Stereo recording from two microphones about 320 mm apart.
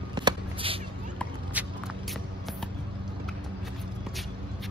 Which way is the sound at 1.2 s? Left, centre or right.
Centre.